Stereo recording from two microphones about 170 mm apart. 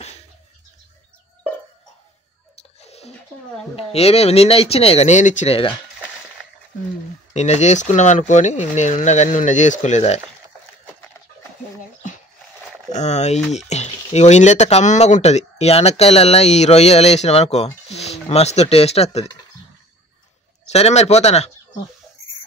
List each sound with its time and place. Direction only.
2.5 s a sound: 40° left (ahead or behind)
3.7 s speech: 35° left (ahead or behind)
7.3 s speech: 40° left (ahead or behind)
12.9 s speech: 40° left (ahead or behind)
20.6 s speech: 40° left (ahead or behind)